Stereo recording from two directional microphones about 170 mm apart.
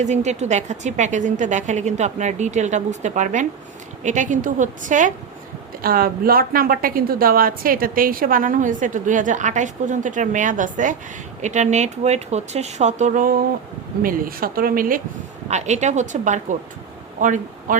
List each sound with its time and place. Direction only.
0.0 s a woman's voice: 45° right (ahead or behind)
5.8 s a woman's voice: 60° right (ahead or behind)
15.4 s a woman's voice: 40° right (ahead or behind)